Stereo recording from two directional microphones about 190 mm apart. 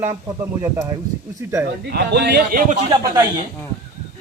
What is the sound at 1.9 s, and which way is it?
Speech, 60° right (ahead or behind).